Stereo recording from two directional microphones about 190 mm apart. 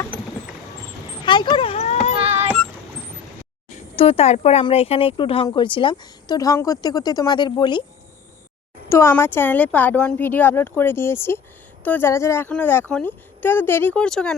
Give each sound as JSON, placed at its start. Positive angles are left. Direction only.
{"t": 1.2, "sound": "dog", "side_deg": 25}
{"t": 2.2, "sound": "a sound", "side_deg": -35}
{"t": 3.7, "sound": "speech", "side_deg": 35}
{"t": 8.9, "sound": "speech", "side_deg": 15}